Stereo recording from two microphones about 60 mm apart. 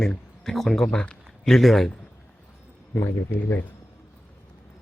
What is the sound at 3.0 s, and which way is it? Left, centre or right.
Speech, left.